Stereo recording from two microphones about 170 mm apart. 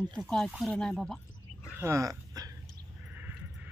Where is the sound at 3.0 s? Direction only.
10° right (ahead or behind).